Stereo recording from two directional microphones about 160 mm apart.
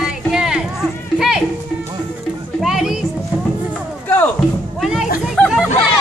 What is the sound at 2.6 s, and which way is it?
Children playing, centre (ahead or behind).